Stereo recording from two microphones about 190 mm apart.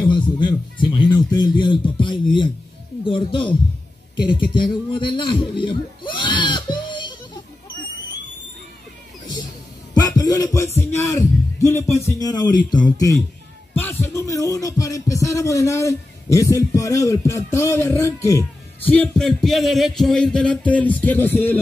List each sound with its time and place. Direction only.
0.1 s a man's voice: 25° left (ahead or behind)
9.9 s a sound: 20° left (ahead or behind)
10.8 s speech: 15° left (ahead or behind)
13.7 s speech: 10° left (ahead or behind)
18.9 s music: 5° left (ahead or behind)